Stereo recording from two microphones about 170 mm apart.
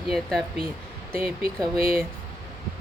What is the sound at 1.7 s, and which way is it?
Speech, 60° right (ahead or behind).